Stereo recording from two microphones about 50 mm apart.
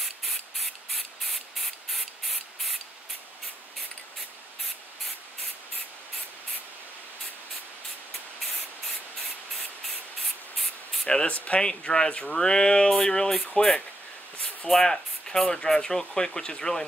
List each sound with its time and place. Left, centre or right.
0.0 s spray: centre
8.4 s spray: centre
11.1 s speech: centre
11.3 s speech: left
11.6 s speech: centre